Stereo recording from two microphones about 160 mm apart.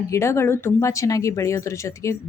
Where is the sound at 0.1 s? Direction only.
15° left (ahead or behind).